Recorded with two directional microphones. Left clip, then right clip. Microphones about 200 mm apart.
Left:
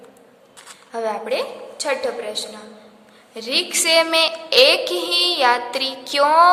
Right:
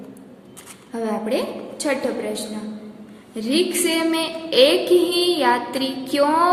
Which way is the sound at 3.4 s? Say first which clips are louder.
Right 1 dB; 25° left (ahead or behind).